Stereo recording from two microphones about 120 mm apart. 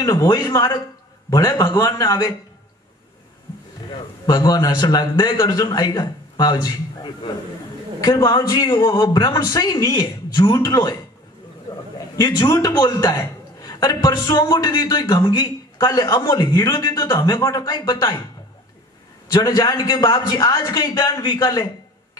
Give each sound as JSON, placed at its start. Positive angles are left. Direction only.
{"t": 0.0, "sound": "a man's voice", "side_deg": 30}
{"t": 4.3, "sound": "a man's voice", "side_deg": 30}
{"t": 19.3, "sound": "a man's voice", "side_deg": 35}